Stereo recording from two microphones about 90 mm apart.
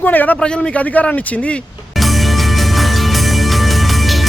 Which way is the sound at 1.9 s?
Centre (ahead or behind).